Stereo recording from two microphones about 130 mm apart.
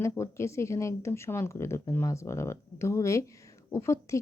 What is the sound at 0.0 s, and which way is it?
Speech, 20° left (ahead or behind).